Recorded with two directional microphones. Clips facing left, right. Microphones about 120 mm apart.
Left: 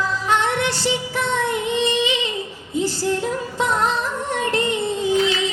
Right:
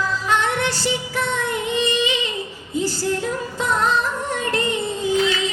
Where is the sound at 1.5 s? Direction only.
25° left (ahead or behind).